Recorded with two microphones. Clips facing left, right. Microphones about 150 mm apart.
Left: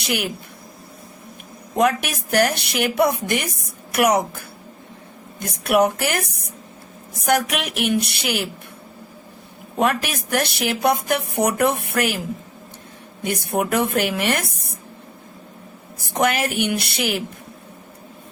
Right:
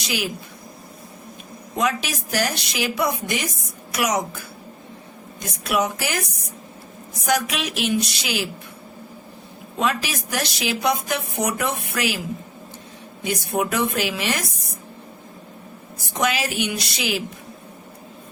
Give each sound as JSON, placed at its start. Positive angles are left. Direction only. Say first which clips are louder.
{"t": 0.0, "sound": "speech", "louder": "left 2 dB", "side_deg": 60}
{"t": 1.8, "sound": "a woman's voice", "louder": "left 5 dB", "side_deg": 60}
{"t": 9.7, "sound": "a woman's voice", "louder": "left 3 dB", "side_deg": 55}
{"t": 13.2, "sound": "a woman's voice", "louder": "left 1 dB", "side_deg": 55}
{"t": 16.2, "sound": "a woman's voice", "louder": "left 3 dB", "side_deg": 55}